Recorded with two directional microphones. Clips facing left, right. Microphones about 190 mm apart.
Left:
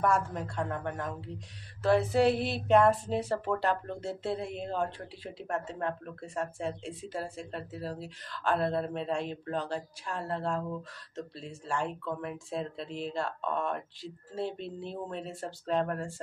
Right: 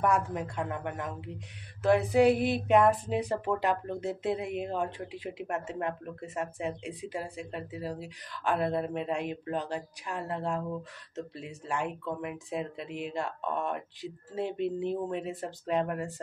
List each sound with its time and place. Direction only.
0.0 s speech: 15° right (ahead or behind)